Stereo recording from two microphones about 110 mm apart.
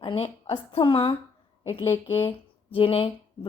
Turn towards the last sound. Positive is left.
turn(degrees=55)  # may be behind; listen again after turning